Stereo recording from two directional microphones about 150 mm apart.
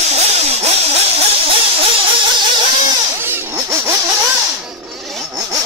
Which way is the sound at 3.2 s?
15° right (ahead or behind).